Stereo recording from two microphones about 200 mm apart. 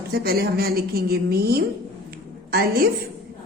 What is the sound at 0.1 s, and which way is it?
A woman's voice, 50° right (ahead or behind).